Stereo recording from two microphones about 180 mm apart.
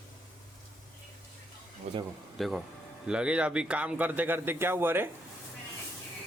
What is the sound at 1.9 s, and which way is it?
Speech, 40° right (ahead or behind).